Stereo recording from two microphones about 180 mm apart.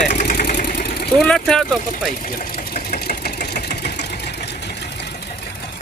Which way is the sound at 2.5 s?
55° left (ahead or behind).